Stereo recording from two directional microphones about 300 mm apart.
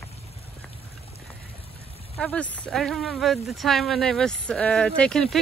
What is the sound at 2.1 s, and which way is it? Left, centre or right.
Speech, centre.